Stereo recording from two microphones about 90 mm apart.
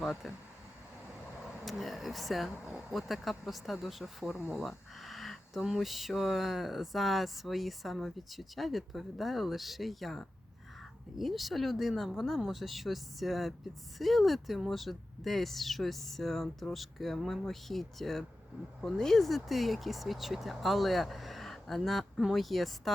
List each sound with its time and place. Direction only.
0.0 s speech: centre (ahead or behind)
1.4 s speech: centre (ahead or behind)